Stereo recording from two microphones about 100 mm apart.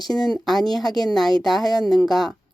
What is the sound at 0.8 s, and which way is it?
Speech, 45° left (ahead or behind).